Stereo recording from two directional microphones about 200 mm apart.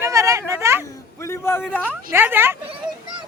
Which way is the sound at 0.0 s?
15° right (ahead or behind).